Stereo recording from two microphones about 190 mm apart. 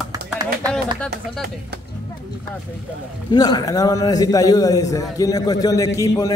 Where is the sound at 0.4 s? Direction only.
20° right (ahead or behind).